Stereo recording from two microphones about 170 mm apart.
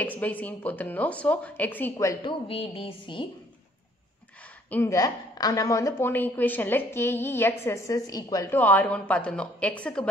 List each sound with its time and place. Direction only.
0.0 s a woman's voice: 10° left (ahead or behind)
2.4 s speech: 35° left (ahead or behind)
4.6 s a woman's voice: 15° left (ahead or behind)